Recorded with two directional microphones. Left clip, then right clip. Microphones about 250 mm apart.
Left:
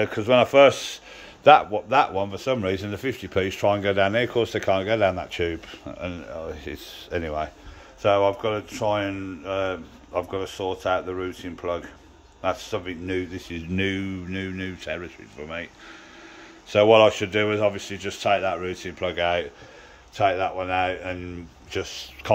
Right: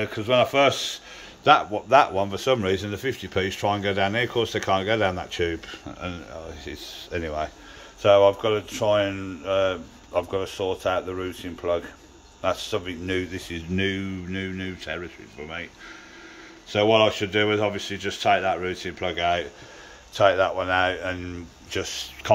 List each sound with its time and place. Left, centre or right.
0.0 s speech: centre
16.7 s speech: centre